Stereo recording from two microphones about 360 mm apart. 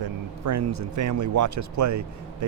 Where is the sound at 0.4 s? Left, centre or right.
Right.